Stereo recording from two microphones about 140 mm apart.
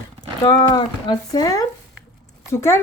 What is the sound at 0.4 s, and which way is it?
A woman's voice, 30° left (ahead or behind).